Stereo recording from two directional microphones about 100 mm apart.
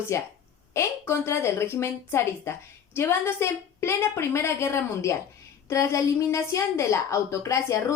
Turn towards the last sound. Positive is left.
turn(degrees=30)  # may be behind; listen again after turning